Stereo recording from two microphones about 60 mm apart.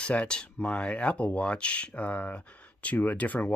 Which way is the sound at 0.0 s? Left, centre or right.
Left.